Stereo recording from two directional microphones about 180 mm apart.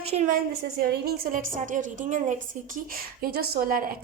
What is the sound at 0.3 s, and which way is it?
A woman's voice, 55° right (ahead or behind).